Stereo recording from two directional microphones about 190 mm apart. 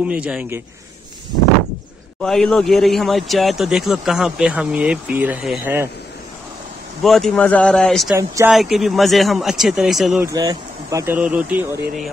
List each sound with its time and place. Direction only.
0.0 s speech: 5° right (ahead or behind)
2.2 s speech: 5° left (ahead or behind)
7.0 s speech: centre (ahead or behind)
8.1 s speech: 15° right (ahead or behind)
8.5 s speech: centre (ahead or behind)
10.2 s speech: 20° right (ahead or behind)
11.1 s speech: 5° right (ahead or behind)